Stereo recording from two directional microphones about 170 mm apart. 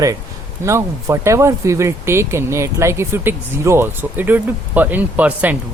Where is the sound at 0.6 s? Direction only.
15° right (ahead or behind).